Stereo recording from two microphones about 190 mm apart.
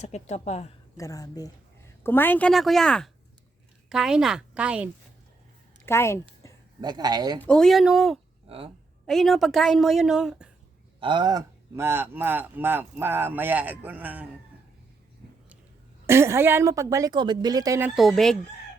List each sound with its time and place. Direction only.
0.0 s a woman's voice: 35° left (ahead or behind)
0.9 s a woman's voice: 20° left (ahead or behind); by 4.9 s 5° right (ahead or behind)
5.8 s a woman's voice: 15° left (ahead or behind)
6.8 s speech: 20° right (ahead or behind)
7.3 s a woman's voice: 5° left (ahead or behind)
8.4 s speech: 30° right (ahead or behind)
9.0 s a woman's voice: centre (ahead or behind)
11.0 s speech: 25° right (ahead or behind)
16.0 s speech: 15° right (ahead or behind); by 18.3 s centre (ahead or behind)